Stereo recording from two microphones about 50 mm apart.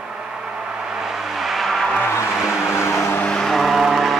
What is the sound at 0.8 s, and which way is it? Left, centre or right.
Vehicle, centre.